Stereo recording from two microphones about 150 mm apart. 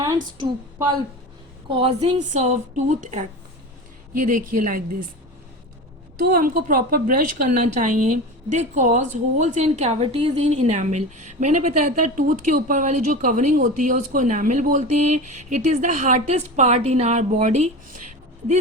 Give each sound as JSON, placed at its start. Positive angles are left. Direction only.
{"t": 1.7, "sound": "a woman's voice", "side_deg": -40}
{"t": 6.2, "sound": "a woman's voice", "side_deg": -80}